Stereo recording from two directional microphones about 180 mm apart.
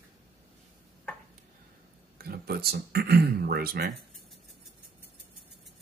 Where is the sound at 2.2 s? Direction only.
60° right (ahead or behind).